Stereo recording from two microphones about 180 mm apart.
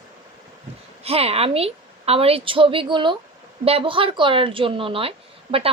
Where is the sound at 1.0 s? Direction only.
35° right (ahead or behind).